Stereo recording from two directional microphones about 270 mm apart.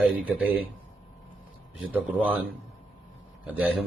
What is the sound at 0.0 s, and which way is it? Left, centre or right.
Speech, centre.